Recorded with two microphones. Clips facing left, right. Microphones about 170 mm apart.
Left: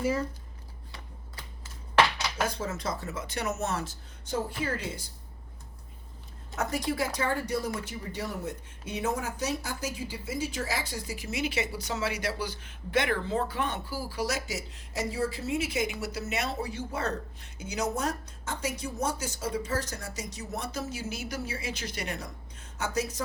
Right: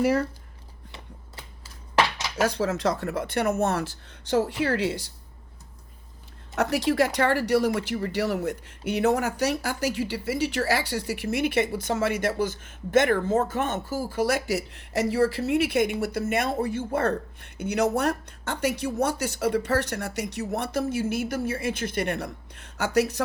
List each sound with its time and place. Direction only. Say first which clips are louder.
0.0 s speech: right 6 dB; 70° right (ahead or behind)
2.4 s speech: right 9 dB; 75° right (ahead or behind)
6.6 s speech: right 7 dB; 70° right (ahead or behind)